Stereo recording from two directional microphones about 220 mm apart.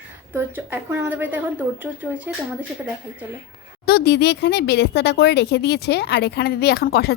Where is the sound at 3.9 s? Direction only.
45° left (ahead or behind).